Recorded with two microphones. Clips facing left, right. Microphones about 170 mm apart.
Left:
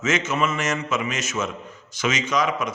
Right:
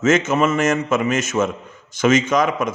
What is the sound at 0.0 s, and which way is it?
A man's voice, 50° right (ahead or behind).